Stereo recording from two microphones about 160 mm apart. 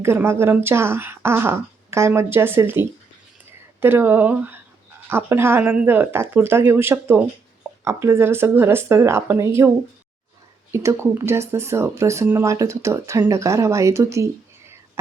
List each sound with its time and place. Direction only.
0.0 s speech: 15° right (ahead or behind)